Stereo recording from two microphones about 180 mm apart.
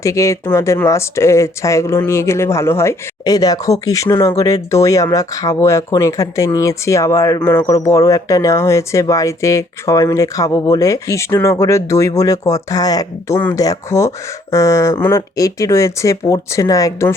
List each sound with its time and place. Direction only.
0.0 s speech: 15° left (ahead or behind)